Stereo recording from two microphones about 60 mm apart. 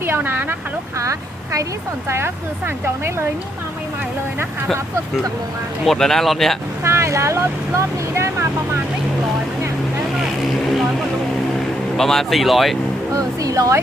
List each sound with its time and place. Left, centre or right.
0.0 s speech: right
2.0 s speech: right
5.8 s speech: centre
6.8 s speech: right
11.9 s speech: centre
13.1 s music: right